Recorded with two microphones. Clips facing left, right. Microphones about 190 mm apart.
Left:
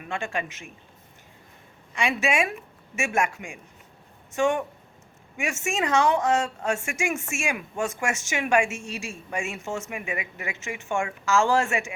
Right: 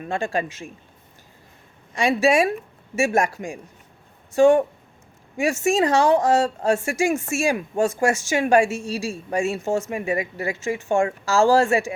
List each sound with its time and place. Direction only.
0.0 s a woman's voice: 35° right (ahead or behind)
1.9 s a woman's voice: 35° right (ahead or behind)